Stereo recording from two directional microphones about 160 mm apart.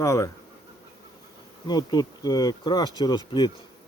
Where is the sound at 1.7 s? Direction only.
25° left (ahead or behind).